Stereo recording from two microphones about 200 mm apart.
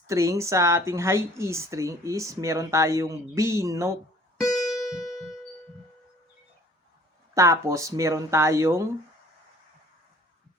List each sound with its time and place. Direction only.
0.1 s speech: 15° right (ahead or behind)
4.4 s music: centre (ahead or behind)
7.3 s speech: 15° right (ahead or behind)